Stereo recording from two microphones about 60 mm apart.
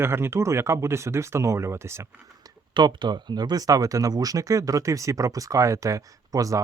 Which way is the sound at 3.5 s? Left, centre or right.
Right.